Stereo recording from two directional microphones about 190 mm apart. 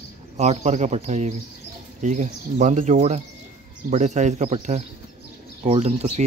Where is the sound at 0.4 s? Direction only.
35° right (ahead or behind).